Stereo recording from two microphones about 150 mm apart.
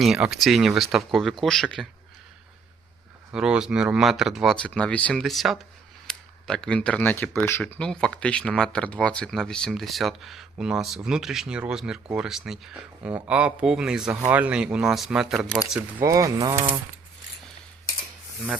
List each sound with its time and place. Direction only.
0.0 s speech: 5° right (ahead or behind)
3.3 s speech: 5° right (ahead or behind)
16.0 s speech: 20° right (ahead or behind)